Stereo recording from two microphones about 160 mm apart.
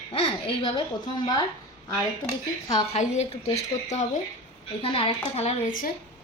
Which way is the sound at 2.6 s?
45° left (ahead or behind).